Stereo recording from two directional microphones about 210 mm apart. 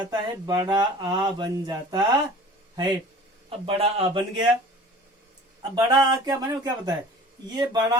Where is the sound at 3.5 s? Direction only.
25° right (ahead or behind).